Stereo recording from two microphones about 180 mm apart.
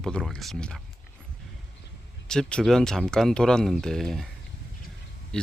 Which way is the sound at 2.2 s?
5° left (ahead or behind).